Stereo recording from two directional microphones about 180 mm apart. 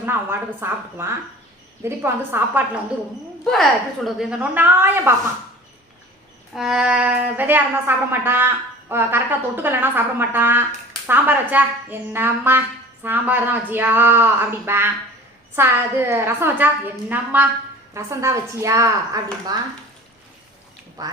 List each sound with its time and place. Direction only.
0.0 s a woman's voice: 10° right (ahead or behind)
3.4 s a woman's voice: centre (ahead or behind)
6.5 s a woman's voice: centre (ahead or behind); by 19.5 s 20° right (ahead or behind)
21.0 s speech: 20° right (ahead or behind)